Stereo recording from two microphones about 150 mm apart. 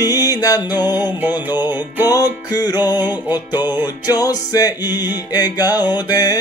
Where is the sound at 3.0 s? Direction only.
15° right (ahead or behind).